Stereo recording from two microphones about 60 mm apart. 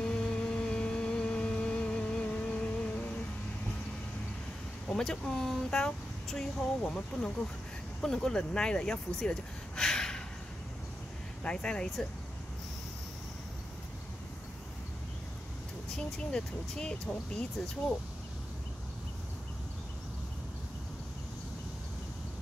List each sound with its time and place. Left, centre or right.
0.0 s vehicle: centre
4.9 s speech: centre
11.4 s speech: centre
16.0 s speech: centre